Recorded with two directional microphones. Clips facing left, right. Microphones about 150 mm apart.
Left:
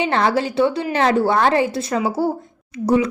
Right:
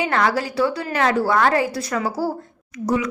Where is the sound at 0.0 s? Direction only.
25° left (ahead or behind).